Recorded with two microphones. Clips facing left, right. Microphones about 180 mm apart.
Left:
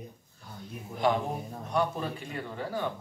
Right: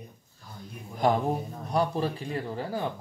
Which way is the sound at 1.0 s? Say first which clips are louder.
Right 3 dB; 40° right (ahead or behind).